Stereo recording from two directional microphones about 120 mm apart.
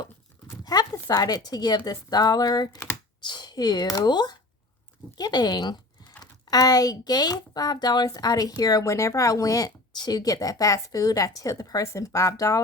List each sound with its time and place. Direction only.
0.6 s speech: 30° left (ahead or behind)